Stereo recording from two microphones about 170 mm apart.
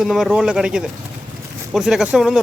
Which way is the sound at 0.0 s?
Centre (ahead or behind).